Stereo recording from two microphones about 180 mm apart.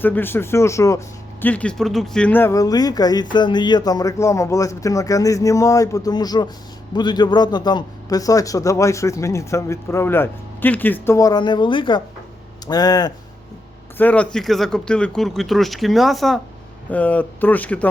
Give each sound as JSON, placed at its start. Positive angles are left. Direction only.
{"t": 0.0, "sound": "a man's voice", "side_deg": 10}
{"t": 14.0, "sound": "speech", "side_deg": 10}